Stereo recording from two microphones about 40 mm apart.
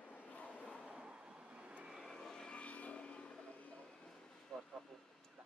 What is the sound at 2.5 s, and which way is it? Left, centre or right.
Vehicle, left.